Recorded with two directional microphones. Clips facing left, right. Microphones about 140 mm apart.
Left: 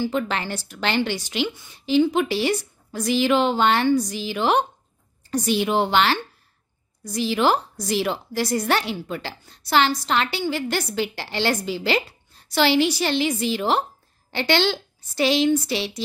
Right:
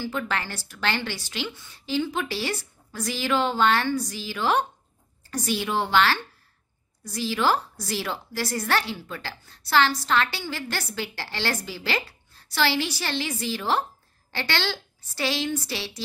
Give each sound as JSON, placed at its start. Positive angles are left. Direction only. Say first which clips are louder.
{"t": 0.0, "sound": "a woman's voice", "louder": "left 5 dB", "side_deg": 20}